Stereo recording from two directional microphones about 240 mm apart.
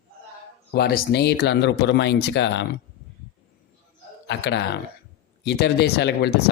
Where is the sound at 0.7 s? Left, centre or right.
Left.